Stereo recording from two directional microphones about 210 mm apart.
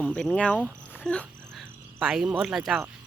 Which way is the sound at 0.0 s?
5° left (ahead or behind).